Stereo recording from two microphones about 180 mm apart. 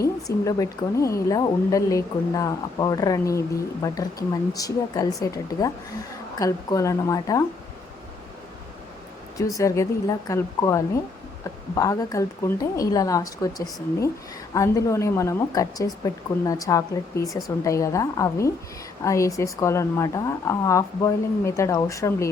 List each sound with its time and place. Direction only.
0.0 s a woman's voice: 20° left (ahead or behind)
9.6 s a woman's voice: 20° left (ahead or behind)
14.5 s speech: 15° left (ahead or behind)